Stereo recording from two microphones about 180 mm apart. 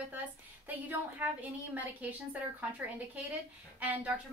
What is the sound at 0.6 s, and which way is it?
A woman's voice, 10° right (ahead or behind).